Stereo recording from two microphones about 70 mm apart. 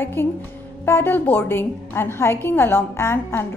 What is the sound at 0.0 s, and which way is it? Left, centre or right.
A woman's voice, left.